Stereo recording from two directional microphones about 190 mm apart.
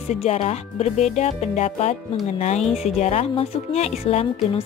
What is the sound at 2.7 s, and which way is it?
Speech, centre (ahead or behind).